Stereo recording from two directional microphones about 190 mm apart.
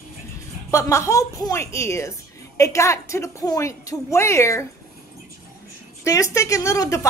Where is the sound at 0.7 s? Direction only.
15° left (ahead or behind).